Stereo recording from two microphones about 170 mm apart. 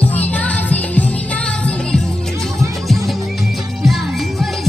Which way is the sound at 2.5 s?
15° right (ahead or behind).